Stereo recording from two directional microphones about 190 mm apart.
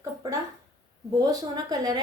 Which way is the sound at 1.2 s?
20° right (ahead or behind).